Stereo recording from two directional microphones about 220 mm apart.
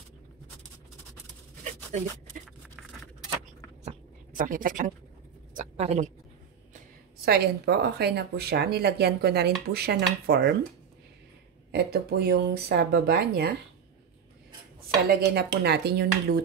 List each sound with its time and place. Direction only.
3.8 s a sound: 40° right (ahead or behind)
7.2 s speech: 45° right (ahead or behind)
11.7 s speech: 45° right (ahead or behind)
15.0 s speech: 45° right (ahead or behind)